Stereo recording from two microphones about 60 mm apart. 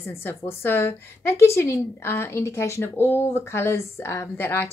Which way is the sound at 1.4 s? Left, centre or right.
Left.